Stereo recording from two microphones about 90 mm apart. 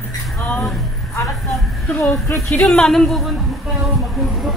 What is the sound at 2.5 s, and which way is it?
Speech, 10° left (ahead or behind).